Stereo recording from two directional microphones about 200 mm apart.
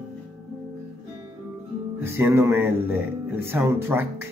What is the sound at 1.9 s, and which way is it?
Speech, 10° right (ahead or behind).